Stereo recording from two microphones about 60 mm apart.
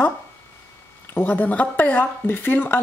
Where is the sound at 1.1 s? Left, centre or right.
Left.